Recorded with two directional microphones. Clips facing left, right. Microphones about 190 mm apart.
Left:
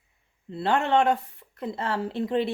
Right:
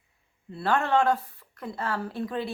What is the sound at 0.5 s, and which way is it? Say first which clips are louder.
Speech: left 2 dB; 20° left (ahead or behind).